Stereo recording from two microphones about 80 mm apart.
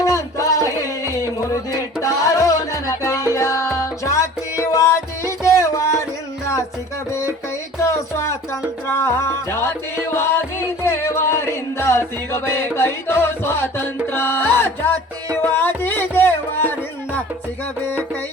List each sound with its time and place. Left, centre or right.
0.0 s music: left